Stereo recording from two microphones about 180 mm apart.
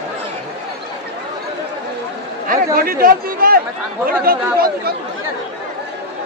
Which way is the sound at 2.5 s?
55° right (ahead or behind).